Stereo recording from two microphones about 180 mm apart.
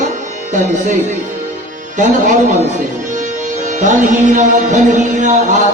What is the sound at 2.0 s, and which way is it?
Speech, 45° right (ahead or behind).